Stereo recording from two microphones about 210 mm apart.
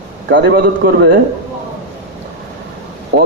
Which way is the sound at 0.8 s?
45° right (ahead or behind).